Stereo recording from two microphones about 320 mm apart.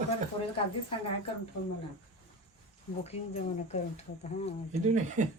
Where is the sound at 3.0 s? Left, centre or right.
Centre.